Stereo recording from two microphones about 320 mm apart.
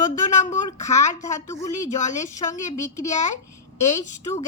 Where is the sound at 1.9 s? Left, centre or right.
Left.